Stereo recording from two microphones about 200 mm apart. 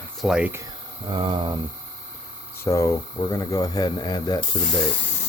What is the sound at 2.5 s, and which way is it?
Speech, 15° left (ahead or behind).